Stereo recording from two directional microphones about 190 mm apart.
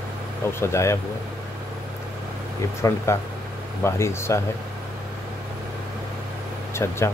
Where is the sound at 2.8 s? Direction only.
15° left (ahead or behind).